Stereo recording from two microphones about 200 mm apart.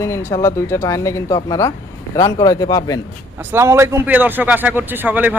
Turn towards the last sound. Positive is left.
turn(degrees=-10)  # may be behind; listen again after turning